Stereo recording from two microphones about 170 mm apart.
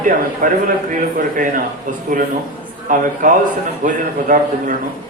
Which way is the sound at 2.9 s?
50° right (ahead or behind).